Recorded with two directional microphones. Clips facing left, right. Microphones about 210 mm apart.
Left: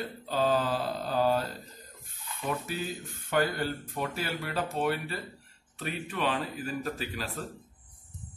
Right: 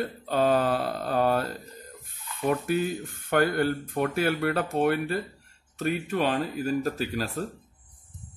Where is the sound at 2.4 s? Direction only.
55° right (ahead or behind).